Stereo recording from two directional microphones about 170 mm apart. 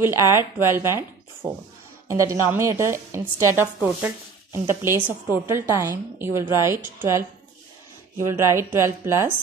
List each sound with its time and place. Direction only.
0.0 s speech: 15° right (ahead or behind)
8.3 s speech: 15° right (ahead or behind)